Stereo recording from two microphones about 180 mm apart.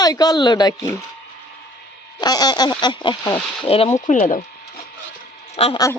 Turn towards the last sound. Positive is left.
turn(degrees=35)  # may be behind; listen again after turning